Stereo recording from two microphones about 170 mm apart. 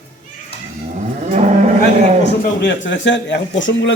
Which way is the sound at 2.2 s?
90° left.